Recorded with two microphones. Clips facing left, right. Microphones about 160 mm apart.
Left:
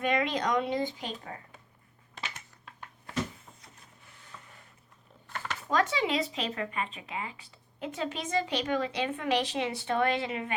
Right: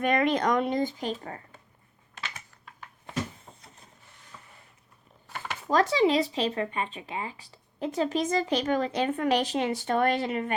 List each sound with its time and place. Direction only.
0.0 s speech: 50° right (ahead or behind)
5.7 s speech: 35° right (ahead or behind)